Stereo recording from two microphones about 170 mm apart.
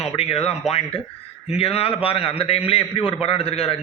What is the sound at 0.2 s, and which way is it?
Speech, 35° left (ahead or behind).